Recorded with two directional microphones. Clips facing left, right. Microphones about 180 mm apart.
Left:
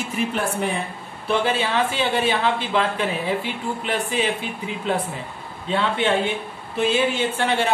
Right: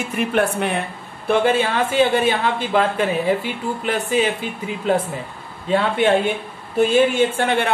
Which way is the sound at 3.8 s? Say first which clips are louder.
Right 4 dB; 45° right (ahead or behind).